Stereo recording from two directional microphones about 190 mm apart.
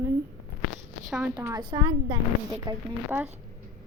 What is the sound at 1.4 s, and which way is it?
A woman's voice, 20° right (ahead or behind).